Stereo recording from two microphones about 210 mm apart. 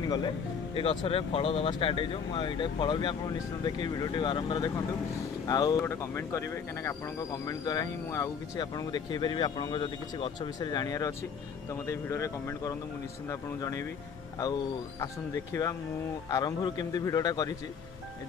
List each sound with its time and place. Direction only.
0.0 s a man's voice: 20° left (ahead or behind)
15.0 s a man's voice: 15° left (ahead or behind)